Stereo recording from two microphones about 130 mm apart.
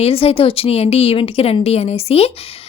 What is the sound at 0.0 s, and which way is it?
A woman's voice, 50° left (ahead or behind).